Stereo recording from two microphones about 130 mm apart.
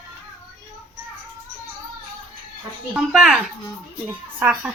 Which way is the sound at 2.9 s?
5° right (ahead or behind).